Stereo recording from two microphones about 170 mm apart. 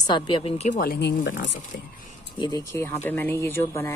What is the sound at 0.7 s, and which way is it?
Speech, 60° left (ahead or behind).